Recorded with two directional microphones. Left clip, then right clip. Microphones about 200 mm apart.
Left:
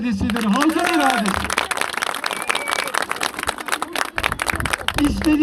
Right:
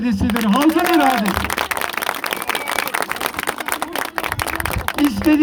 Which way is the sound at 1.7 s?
35° left (ahead or behind).